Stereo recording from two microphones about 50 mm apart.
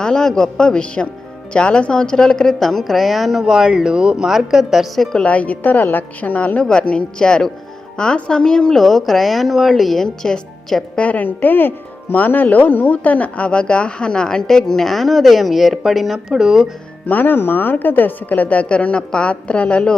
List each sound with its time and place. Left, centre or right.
0.0 s speech: centre
2.6 s speech: centre
3.4 s a woman's voice: centre
5.1 s a woman's voice: left
8.8 s speech: centre
10.9 s a woman's voice: left; by 16.6 s centre
17.1 s a woman's voice: left